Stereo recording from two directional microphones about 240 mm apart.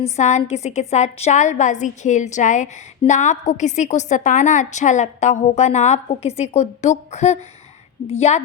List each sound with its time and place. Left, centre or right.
0.0 s a woman's voice: left